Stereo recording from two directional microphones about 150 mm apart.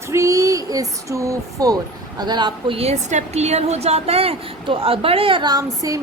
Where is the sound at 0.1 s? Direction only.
20° right (ahead or behind).